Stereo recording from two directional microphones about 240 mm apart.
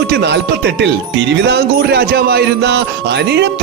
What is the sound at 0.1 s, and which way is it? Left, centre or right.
Speech, right.